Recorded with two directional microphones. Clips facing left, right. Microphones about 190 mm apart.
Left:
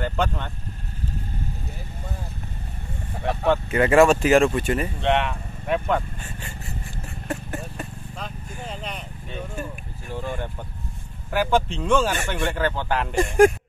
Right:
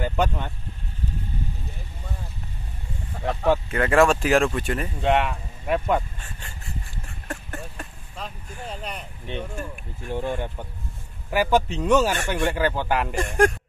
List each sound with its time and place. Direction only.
0.0 s speech: 10° right (ahead or behind)
3.7 s speech: 5° left (ahead or behind)
7.2 s vehicle: 5° left (ahead or behind)
10.1 s speech: 20° right (ahead or behind)
11.2 s speech: 5° right (ahead or behind)
13.1 s speech: 10° left (ahead or behind)